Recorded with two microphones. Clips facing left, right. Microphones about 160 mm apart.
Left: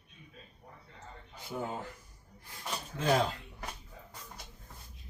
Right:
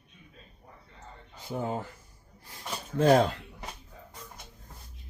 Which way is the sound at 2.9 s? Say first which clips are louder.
Right 8 dB; 50° right (ahead or behind).